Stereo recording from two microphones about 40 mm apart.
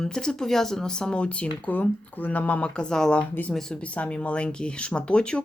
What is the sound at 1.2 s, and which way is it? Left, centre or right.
Speech, left.